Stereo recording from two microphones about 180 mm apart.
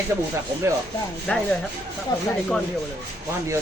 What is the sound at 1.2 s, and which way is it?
Speech, 5° left (ahead or behind).